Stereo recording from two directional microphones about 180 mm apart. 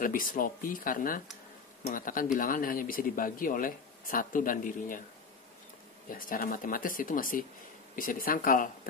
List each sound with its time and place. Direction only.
0.0 s speech: 50° left (ahead or behind)
6.0 s speech: 50° left (ahead or behind)